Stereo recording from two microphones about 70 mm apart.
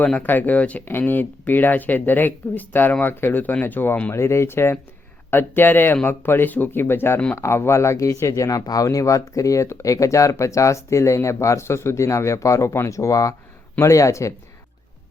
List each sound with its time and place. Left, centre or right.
0.0 s speech: centre
4.1 s speech: left